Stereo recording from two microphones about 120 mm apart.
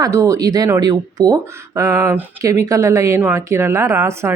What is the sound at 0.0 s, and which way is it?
A woman's voice, 25° right (ahead or behind).